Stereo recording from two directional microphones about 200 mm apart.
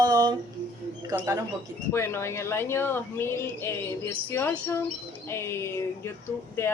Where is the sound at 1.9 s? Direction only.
15° left (ahead or behind).